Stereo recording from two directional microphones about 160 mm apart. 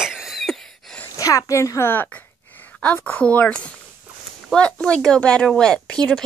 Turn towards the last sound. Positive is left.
turn(degrees=5)  # may be behind; listen again after turning